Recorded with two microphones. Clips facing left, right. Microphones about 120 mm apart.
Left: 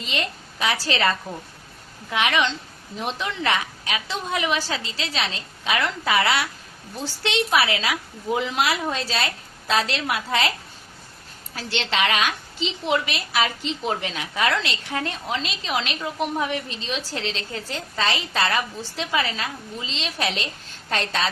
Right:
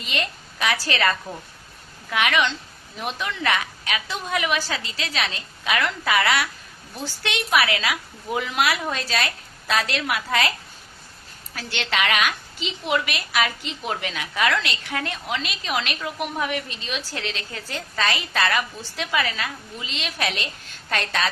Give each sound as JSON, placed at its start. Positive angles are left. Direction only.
{"t": 0.0, "sound": "a woman's voice", "side_deg": 30}
{"t": 11.5, "sound": "a woman's voice", "side_deg": 30}